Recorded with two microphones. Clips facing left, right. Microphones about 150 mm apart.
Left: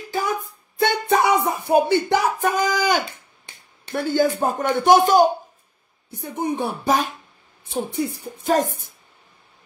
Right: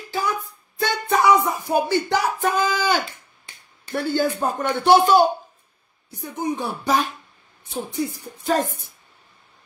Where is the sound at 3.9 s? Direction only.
15° left (ahead or behind).